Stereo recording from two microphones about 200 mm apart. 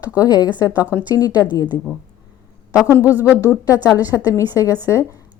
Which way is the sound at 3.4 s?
15° left (ahead or behind).